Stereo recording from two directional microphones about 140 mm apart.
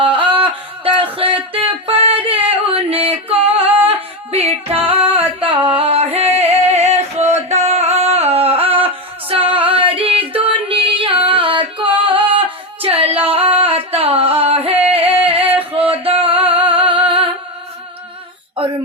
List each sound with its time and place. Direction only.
0.0 s a sound: 35° right (ahead or behind)
1.5 s music: 40° right (ahead or behind)
2.5 s singing: 40° right (ahead or behind)
9.3 s female singing: 40° right (ahead or behind)
14.8 s music: 40° right (ahead or behind)
16.6 s singing: 40° right (ahead or behind)